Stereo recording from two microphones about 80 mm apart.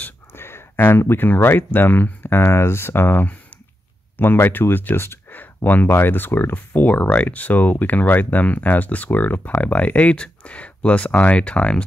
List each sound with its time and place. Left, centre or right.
0.3 s speech: left; by 11.8 s centre